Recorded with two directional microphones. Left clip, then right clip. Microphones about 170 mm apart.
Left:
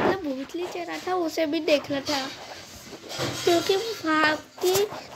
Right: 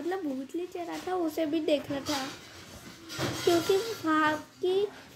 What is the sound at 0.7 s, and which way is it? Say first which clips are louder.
Speech: left 5 dB; 20° left (ahead or behind).